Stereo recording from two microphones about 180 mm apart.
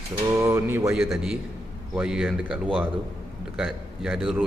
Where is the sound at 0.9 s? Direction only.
Centre (ahead or behind).